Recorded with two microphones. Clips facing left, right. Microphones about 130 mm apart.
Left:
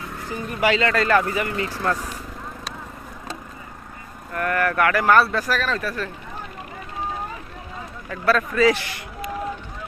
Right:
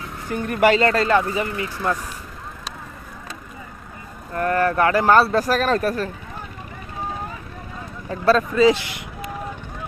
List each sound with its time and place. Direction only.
0.4 s speech: 55° right (ahead or behind)
1.0 s speech: 20° right (ahead or behind)
4.4 s speech: 30° right (ahead or behind); by 6.1 s 45° right (ahead or behind)
8.0 s speech: 30° right (ahead or behind)